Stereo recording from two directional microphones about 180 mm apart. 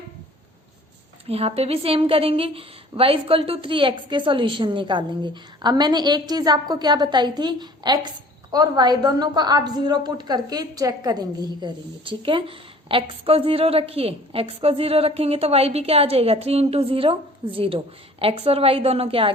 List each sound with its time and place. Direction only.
1.3 s a woman's voice: 35° right (ahead or behind)